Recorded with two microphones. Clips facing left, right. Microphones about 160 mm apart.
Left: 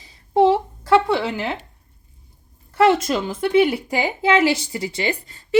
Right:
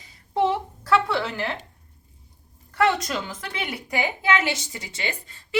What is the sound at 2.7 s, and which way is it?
A woman's voice, 25° left (ahead or behind).